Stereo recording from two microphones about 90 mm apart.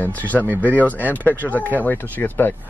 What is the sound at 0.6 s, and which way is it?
Speech, 15° left (ahead or behind).